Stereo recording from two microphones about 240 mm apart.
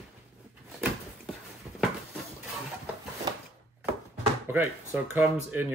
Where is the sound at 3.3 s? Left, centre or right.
Centre.